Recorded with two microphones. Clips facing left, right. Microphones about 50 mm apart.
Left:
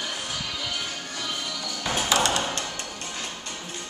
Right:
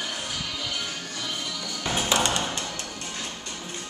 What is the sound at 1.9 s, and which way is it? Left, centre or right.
Ping, right.